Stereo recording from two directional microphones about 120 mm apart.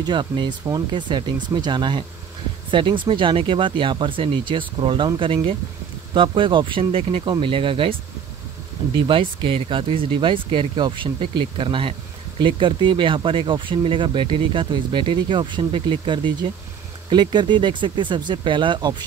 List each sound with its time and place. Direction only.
0.0 s speech: 40° right (ahead or behind)